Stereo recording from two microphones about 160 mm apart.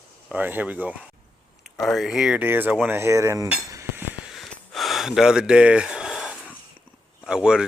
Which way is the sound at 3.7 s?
15° right (ahead or behind).